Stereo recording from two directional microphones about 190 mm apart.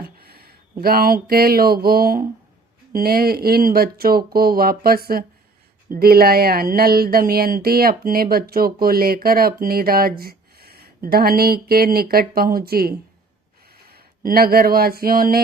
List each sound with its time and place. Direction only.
0.0 s speech: 50° right (ahead or behind)
14.3 s speech: 50° right (ahead or behind)